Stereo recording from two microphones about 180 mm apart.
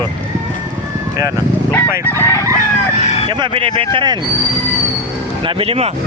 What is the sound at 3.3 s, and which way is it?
Speech, 25° right (ahead or behind).